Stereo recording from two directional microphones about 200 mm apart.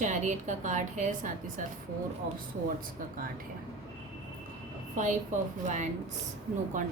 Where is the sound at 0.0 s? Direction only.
40° right (ahead or behind).